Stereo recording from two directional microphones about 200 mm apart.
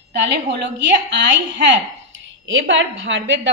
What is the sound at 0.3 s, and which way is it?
A woman's voice, 60° right (ahead or behind).